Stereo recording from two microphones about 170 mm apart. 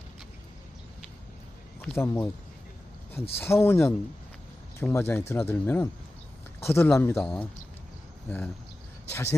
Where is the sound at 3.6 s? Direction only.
15° left (ahead or behind).